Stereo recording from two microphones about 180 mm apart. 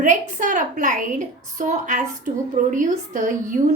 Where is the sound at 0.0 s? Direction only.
45° right (ahead or behind).